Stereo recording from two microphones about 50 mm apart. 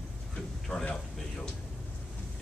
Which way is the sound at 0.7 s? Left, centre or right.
Left.